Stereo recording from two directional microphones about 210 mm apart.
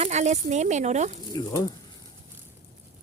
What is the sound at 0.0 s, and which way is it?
Speech, 35° right (ahead or behind).